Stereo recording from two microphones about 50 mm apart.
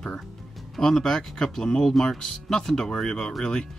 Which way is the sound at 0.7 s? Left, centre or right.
Centre.